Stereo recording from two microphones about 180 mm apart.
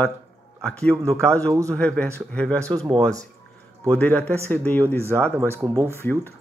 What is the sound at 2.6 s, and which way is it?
Speech, 20° right (ahead or behind).